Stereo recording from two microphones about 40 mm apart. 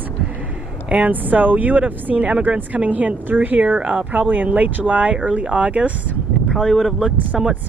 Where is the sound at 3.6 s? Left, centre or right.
Right.